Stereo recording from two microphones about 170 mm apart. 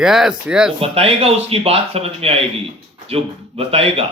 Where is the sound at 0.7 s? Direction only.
35° right (ahead or behind).